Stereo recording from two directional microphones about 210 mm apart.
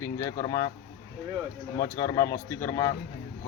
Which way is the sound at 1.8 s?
15° left (ahead or behind).